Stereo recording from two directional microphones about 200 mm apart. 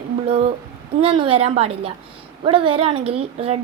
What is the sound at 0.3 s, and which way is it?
A woman's voice, 30° right (ahead or behind).